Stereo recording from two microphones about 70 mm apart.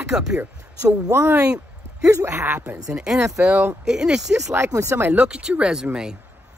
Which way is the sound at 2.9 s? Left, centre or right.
Centre.